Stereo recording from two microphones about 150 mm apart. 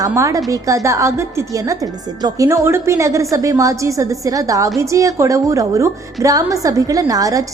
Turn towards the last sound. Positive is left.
turn(degrees=-25)  # may be behind; listen again after turning